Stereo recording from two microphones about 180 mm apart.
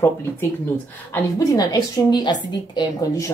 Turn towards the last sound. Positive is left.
turn(degrees=20)  # may be behind; listen again after turning